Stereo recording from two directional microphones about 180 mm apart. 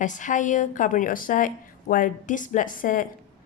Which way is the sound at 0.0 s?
45° left (ahead or behind).